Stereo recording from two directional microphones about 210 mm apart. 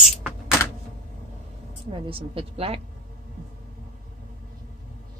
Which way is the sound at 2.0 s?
25° right (ahead or behind).